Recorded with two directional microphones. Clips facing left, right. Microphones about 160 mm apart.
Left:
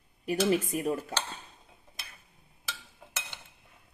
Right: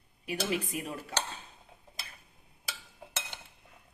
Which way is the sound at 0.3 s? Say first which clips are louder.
Left 6 dB; 40° left (ahead or behind).